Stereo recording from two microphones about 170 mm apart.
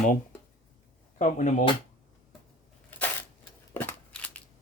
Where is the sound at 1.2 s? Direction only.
45° left (ahead or behind).